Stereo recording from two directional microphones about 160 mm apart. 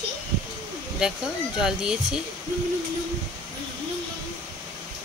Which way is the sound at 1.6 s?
5° right (ahead or behind).